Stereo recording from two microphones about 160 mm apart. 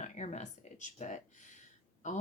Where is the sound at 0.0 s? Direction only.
45° left (ahead or behind).